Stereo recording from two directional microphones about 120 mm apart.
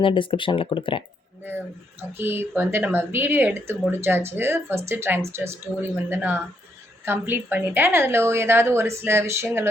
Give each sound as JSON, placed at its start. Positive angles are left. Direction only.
{"t": 0.0, "sound": "speech", "side_deg": 45}
{"t": 2.1, "sound": "a woman's voice", "side_deg": -20}